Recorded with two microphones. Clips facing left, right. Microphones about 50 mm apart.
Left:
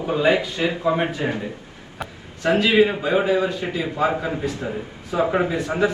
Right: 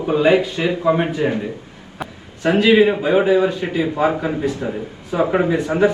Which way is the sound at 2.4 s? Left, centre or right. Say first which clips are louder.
Right 4 dB; right.